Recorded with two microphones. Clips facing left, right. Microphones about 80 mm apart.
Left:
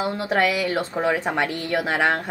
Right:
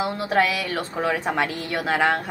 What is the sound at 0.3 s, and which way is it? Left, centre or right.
A woman's voice, centre.